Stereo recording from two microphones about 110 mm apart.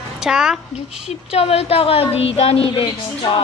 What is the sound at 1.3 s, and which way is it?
A woman's voice, 65° left (ahead or behind).